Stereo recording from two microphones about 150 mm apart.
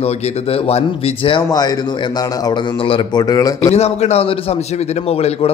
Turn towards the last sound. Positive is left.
turn(degrees=40)  # may be behind; listen again after turning